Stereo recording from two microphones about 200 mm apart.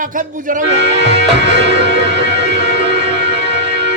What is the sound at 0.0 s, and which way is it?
Music, 40° right (ahead or behind).